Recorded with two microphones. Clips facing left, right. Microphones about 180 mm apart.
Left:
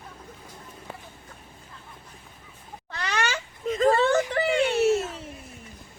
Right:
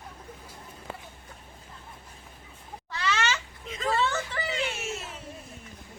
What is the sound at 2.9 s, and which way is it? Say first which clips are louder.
Cat: right 1 dB; 55° left (ahead or behind).